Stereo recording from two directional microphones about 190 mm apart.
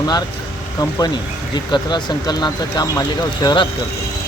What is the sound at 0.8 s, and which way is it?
Speech, 20° left (ahead or behind).